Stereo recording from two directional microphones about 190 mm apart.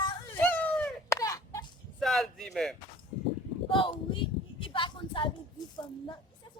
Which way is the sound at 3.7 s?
25° left (ahead or behind).